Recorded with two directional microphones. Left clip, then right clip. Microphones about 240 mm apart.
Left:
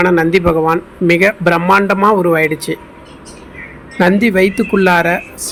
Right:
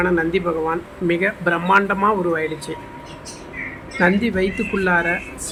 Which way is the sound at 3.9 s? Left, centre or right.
Left.